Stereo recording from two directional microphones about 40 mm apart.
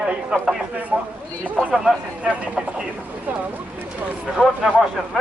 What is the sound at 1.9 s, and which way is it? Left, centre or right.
Speech, centre.